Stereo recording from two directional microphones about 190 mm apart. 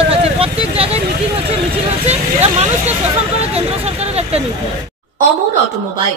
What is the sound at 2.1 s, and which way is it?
Speech, 35° right (ahead or behind).